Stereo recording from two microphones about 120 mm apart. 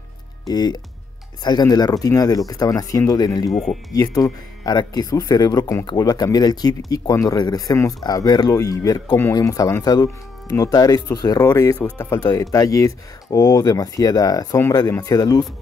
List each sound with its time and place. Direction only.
0.5 s speech: 35° left (ahead or behind)
3.4 s speech: 5° left (ahead or behind)
3.9 s speech: 30° left (ahead or behind)